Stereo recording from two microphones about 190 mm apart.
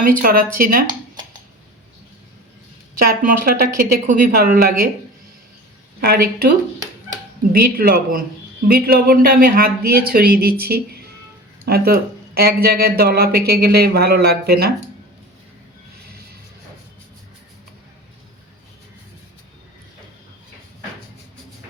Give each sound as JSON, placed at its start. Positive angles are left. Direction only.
{"t": 0.0, "sound": "speech", "side_deg": -45}
{"t": 3.0, "sound": "speech", "side_deg": -50}
{"t": 6.0, "sound": "speech", "side_deg": -55}
{"t": 7.5, "sound": "speech", "side_deg": -50}